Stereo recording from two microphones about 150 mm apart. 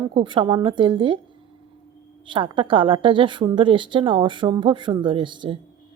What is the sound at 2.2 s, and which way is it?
A woman's voice, 35° right (ahead or behind).